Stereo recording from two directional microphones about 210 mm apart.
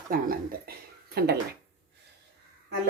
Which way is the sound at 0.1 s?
45° right (ahead or behind).